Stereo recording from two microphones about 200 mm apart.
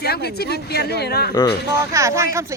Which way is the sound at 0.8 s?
50° left (ahead or behind).